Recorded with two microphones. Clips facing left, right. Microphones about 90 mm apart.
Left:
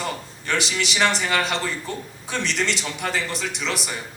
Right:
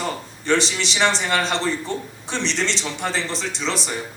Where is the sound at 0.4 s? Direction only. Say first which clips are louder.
Right 4 dB; 30° right (ahead or behind).